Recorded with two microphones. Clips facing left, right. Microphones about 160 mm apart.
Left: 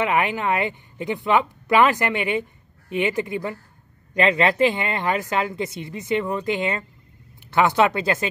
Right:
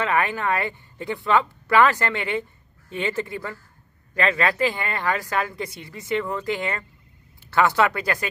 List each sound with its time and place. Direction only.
0.0 s speech: 20° left (ahead or behind)